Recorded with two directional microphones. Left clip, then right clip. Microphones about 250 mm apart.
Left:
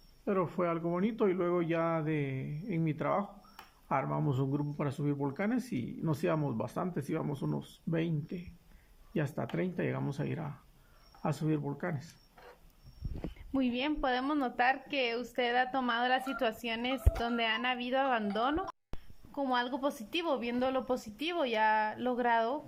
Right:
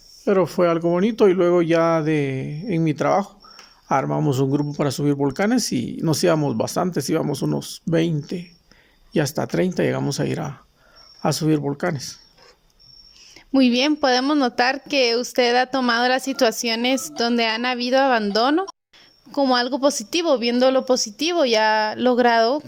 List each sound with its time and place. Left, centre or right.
0.3 s speech: right
13.5 s speech: right